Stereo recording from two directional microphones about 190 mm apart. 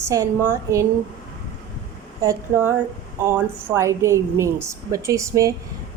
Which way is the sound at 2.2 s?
15° right (ahead or behind).